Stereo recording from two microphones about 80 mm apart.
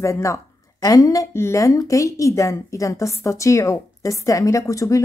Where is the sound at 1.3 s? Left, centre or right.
Left.